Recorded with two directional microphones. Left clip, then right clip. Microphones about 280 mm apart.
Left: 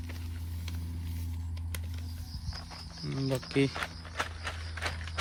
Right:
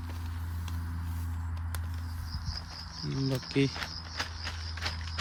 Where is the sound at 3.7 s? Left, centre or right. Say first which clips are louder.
Left 1 dB; centre.